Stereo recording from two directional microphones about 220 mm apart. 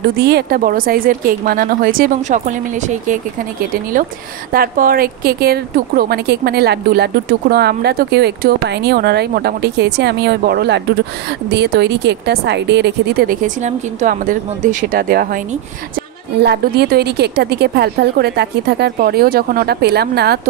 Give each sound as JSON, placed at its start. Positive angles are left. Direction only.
{"t": 0.0, "sound": "a woman's voice", "side_deg": -45}
{"t": 4.5, "sound": "speech", "side_deg": -40}